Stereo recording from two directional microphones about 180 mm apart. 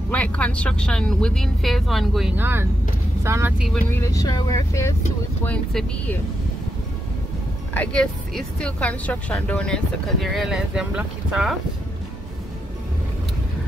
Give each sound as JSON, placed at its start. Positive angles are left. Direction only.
{"t": 0.1, "sound": "speech", "side_deg": 5}
{"t": 3.9, "sound": "speech", "side_deg": 20}
{"t": 5.4, "sound": "speech", "side_deg": 5}
{"t": 7.7, "sound": "speech", "side_deg": 5}